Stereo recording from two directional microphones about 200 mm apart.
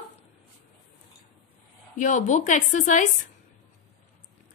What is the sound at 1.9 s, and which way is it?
Speech, 40° left (ahead or behind).